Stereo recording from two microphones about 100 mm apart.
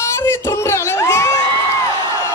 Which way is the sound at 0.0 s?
30° left (ahead or behind).